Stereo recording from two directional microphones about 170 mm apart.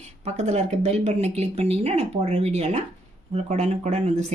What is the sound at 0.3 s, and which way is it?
Speech, 40° right (ahead or behind).